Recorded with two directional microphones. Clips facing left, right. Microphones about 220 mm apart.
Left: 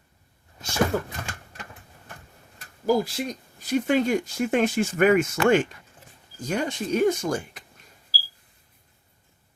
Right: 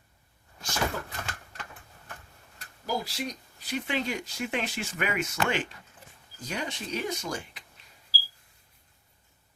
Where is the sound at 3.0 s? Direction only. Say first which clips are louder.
Left 5 dB; 50° left (ahead or behind).